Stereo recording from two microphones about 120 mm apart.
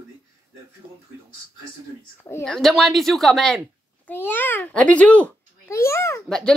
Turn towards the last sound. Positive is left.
turn(degrees=5)  # may be behind; listen again after turning